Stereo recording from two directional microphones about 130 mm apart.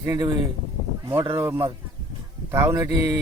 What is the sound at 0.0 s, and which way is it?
A man's voice, 25° right (ahead or behind).